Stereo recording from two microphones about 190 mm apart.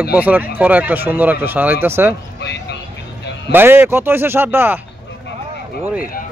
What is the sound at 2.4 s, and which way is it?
Music, 60° left (ahead or behind).